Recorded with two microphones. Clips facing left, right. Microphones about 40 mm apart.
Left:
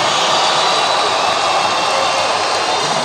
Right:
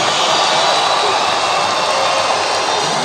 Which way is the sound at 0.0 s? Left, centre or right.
Left.